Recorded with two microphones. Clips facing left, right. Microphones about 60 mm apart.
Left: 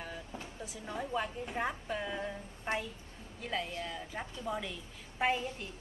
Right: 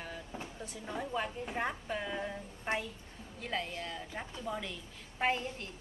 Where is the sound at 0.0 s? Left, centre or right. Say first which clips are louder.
Even; centre.